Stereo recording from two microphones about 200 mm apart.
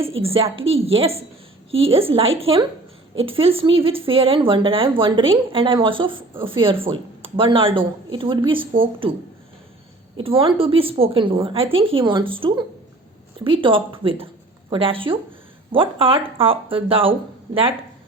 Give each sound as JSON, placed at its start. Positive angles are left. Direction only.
{"t": 0.2, "sound": "speech", "side_deg": -30}
{"t": 10.2, "sound": "speech", "side_deg": -25}